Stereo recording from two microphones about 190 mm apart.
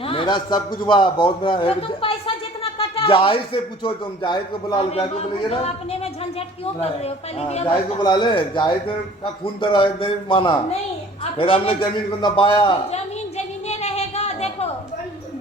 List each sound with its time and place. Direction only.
0.0 s a man's voice: 30° left (ahead or behind)
7.9 s a man's voice: 20° left (ahead or behind)
11.2 s a sound: 30° left (ahead or behind)